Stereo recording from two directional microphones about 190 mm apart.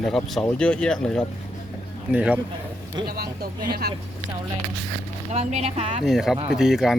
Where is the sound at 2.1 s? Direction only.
5° right (ahead or behind).